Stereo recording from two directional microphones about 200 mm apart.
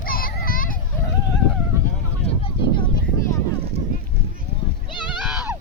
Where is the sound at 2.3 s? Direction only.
30° left (ahead or behind).